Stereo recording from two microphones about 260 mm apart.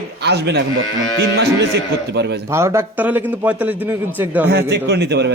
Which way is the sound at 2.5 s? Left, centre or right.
Centre.